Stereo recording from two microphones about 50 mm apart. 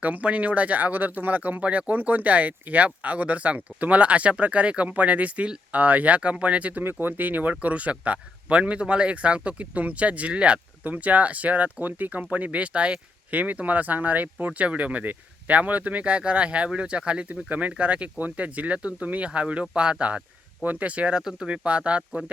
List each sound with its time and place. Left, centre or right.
0.0 s speech: right
6.8 s speech: right
21.2 s speech: centre